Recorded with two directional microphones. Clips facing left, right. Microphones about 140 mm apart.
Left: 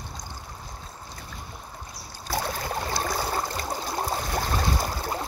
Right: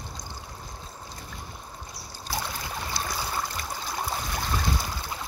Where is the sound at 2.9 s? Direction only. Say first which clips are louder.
Left 3 dB; 45° left (ahead or behind).